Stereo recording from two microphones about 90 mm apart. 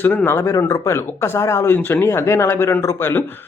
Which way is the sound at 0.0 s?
20° left (ahead or behind).